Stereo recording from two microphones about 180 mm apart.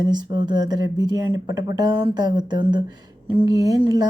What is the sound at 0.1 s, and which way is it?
Speech, 25° right (ahead or behind).